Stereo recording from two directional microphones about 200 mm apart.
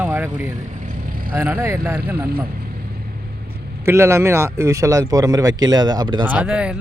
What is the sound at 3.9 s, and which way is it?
Speech, 10° right (ahead or behind).